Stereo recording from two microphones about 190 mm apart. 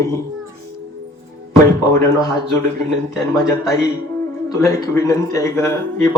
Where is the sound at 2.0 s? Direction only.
20° left (ahead or behind).